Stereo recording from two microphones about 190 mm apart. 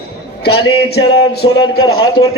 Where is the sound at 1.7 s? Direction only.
90° left.